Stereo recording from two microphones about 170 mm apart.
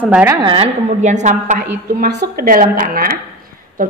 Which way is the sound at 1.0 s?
45° right (ahead or behind).